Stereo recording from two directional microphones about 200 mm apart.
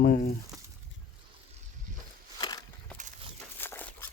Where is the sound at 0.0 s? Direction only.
50° left (ahead or behind).